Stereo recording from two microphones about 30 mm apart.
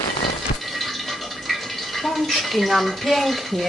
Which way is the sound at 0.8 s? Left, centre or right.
Centre.